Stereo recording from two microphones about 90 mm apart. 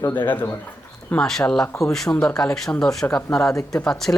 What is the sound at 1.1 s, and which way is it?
Speech, 5° left (ahead or behind).